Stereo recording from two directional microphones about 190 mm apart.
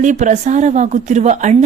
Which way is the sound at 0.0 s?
40° right (ahead or behind).